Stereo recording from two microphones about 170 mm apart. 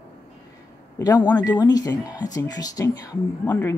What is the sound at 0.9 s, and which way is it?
Speech, 20° left (ahead or behind).